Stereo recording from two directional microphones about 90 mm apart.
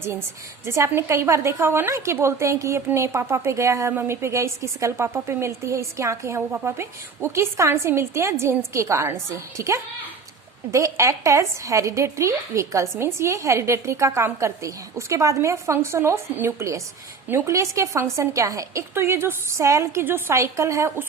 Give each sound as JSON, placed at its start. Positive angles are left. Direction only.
{"t": 0.0, "sound": "a woman's voice", "side_deg": -30}
{"t": 17.5, "sound": "a woman's voice", "side_deg": -35}